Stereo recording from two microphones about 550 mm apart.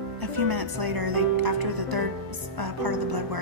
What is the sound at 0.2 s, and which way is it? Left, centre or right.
Speech, right.